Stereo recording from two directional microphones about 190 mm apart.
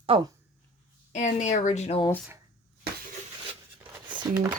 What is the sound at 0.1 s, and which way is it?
Speech, 30° right (ahead or behind).